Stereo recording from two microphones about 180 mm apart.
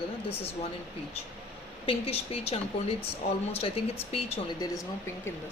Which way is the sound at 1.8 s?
30° left (ahead or behind).